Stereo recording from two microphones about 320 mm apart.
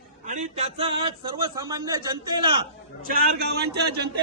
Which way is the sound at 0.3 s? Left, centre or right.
Right.